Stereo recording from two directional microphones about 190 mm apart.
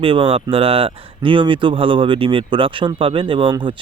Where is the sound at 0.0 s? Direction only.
30° right (ahead or behind).